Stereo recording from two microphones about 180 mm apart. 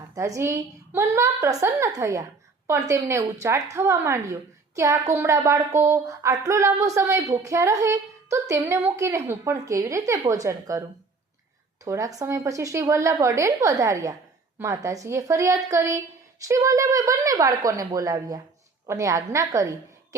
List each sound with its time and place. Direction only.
0.1 s a woman's voice: 15° right (ahead or behind)
11.9 s a woman's voice: 20° right (ahead or behind)